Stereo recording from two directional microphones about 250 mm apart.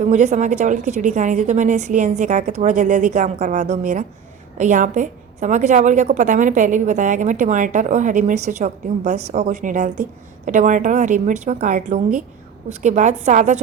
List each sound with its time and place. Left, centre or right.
0.0 s a woman's voice: right